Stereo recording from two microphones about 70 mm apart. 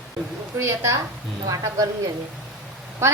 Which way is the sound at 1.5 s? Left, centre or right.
Right.